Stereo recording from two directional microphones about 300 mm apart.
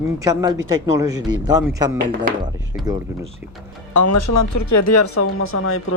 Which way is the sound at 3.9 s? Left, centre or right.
Left.